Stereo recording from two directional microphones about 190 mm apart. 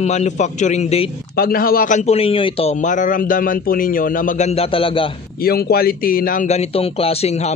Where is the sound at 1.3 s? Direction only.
50° left (ahead or behind); by 5.1 s 30° left (ahead or behind).